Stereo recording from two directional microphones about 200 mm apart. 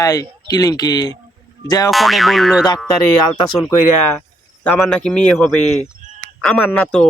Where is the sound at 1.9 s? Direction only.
Centre (ahead or behind).